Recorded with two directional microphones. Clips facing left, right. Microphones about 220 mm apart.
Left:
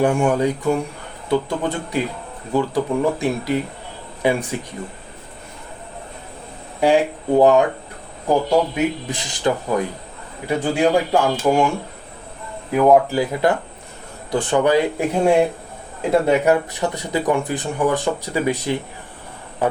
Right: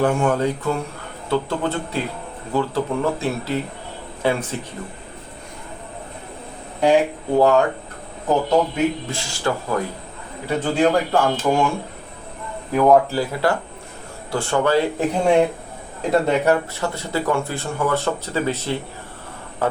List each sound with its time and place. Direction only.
0.0 s speech: 15° left (ahead or behind)
7.3 s speech: 15° left (ahead or behind)
12.7 s speech: 10° left (ahead or behind)